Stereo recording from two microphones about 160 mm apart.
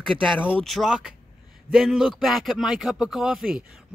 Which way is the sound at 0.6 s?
Centre (ahead or behind).